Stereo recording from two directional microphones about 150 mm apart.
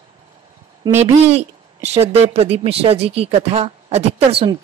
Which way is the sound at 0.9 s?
45° right (ahead or behind).